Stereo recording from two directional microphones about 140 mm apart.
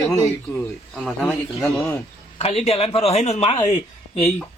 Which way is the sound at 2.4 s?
50° left (ahead or behind).